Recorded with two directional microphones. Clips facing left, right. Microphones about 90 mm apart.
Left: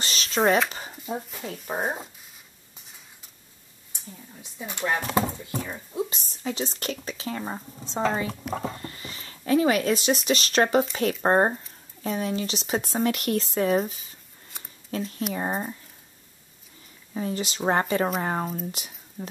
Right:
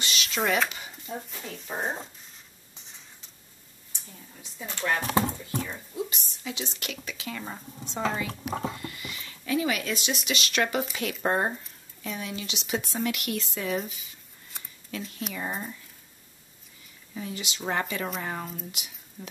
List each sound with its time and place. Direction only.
0.0 s a sound: 35° left (ahead or behind)
0.7 s dog: 35° left (ahead or behind)
1.3 s speech: 5° left (ahead or behind)
4.4 s speech: 15° left (ahead or behind)
5.0 s speech: 5° left (ahead or behind)
5.9 s speech: 35° left (ahead or behind)
8.3 s speech: centre (ahead or behind)
8.7 s speech: 35° left (ahead or behind)
17.1 s speech: 40° left (ahead or behind)